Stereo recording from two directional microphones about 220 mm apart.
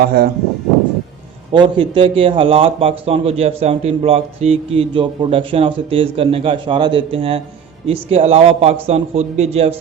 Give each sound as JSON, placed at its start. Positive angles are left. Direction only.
{"t": 0.0, "sound": "speech", "side_deg": -45}
{"t": 1.5, "sound": "speech", "side_deg": -20}